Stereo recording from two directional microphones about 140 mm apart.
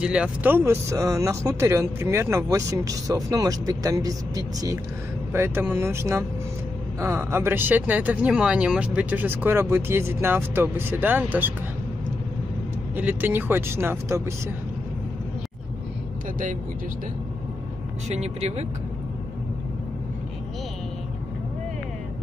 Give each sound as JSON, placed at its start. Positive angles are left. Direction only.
{"t": 0.0, "sound": "speech", "side_deg": -5}
{"t": 12.9, "sound": "speech", "side_deg": -15}
{"t": 18.0, "sound": "speech", "side_deg": -50}